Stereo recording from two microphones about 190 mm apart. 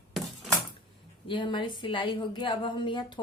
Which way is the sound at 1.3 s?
25° left (ahead or behind).